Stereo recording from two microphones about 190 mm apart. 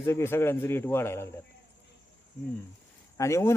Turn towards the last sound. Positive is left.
turn(degrees=15)  # may be behind; listen again after turning